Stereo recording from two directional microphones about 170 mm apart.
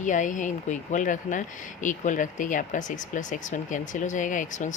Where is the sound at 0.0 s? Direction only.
50° left (ahead or behind).